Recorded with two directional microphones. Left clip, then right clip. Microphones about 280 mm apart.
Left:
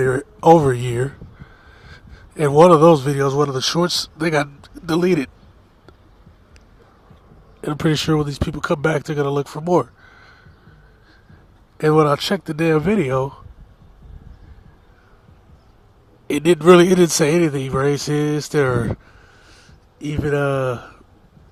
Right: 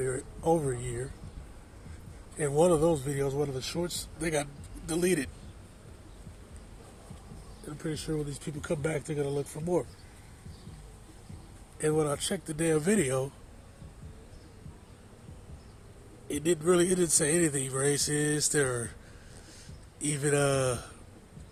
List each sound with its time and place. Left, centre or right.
0.0 s a man's voice: left
2.4 s a man's voice: left
7.8 s a man's voice: left
11.8 s a man's voice: left
16.2 s a man's voice: left
20.0 s a man's voice: left